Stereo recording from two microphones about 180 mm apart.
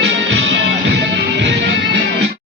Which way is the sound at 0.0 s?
90° right.